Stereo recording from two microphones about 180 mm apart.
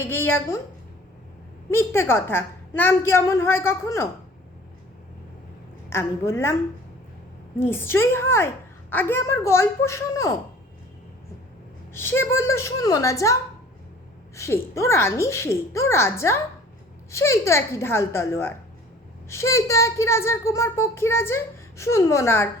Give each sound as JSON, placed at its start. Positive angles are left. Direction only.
{"t": 0.0, "sound": "a child's voice", "side_deg": 10}
{"t": 1.7, "sound": "a child's voice", "side_deg": 15}
{"t": 5.9, "sound": "a child's voice", "side_deg": 15}
{"t": 7.6, "sound": "a child's voice", "side_deg": 10}
{"t": 11.9, "sound": "a child's voice", "side_deg": 15}